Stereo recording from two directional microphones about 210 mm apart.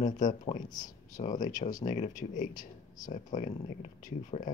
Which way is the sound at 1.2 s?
35° left (ahead or behind).